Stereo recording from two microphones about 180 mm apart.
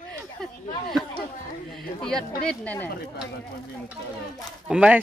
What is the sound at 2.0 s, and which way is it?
Speech, centre (ahead or behind).